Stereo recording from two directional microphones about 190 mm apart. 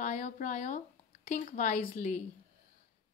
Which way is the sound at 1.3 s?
40° left (ahead or behind).